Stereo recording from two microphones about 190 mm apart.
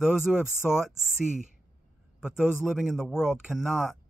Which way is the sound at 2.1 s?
5° right (ahead or behind).